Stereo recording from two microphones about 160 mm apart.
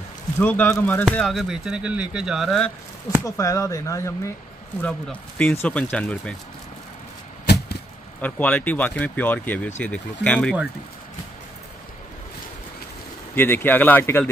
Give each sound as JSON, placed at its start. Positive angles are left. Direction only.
{"t": 0.4, "sound": "speech", "side_deg": 10}
{"t": 1.1, "sound": "speech", "side_deg": 0}
{"t": 3.3, "sound": "speech", "side_deg": 20}
{"t": 4.8, "sound": "speech", "side_deg": 10}
{"t": 7.4, "sound": "a sound", "side_deg": 90}
{"t": 8.2, "sound": "speech", "side_deg": 10}
{"t": 13.3, "sound": "speech", "side_deg": 15}